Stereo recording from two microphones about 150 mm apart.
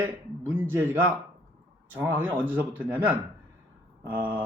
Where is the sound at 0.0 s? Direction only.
15° right (ahead or behind).